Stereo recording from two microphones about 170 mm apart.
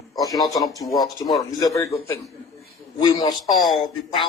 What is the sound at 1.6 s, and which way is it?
Speech, 20° left (ahead or behind).